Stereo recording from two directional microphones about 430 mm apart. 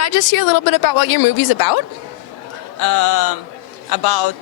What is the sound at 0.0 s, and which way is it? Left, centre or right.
A woman's voice, left.